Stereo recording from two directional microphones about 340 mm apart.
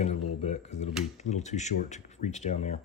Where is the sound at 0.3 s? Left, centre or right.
Centre.